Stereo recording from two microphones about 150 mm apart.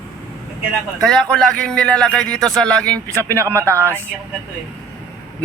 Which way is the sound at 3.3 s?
20° right (ahead or behind).